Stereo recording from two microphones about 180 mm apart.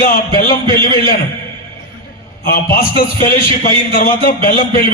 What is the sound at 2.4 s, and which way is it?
Speech, 50° left (ahead or behind).